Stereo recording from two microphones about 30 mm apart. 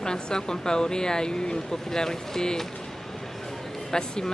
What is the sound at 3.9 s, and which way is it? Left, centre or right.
Speech, left.